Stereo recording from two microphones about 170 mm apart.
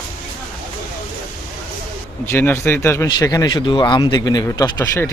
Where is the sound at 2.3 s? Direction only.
10° left (ahead or behind).